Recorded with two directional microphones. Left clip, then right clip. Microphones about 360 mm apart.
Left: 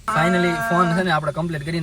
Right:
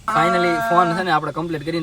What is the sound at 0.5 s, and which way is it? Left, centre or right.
Speech, centre.